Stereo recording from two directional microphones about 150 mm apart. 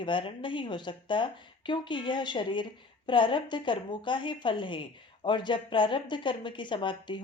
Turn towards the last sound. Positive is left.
turn(degrees=30)  # may be behind; listen again after turning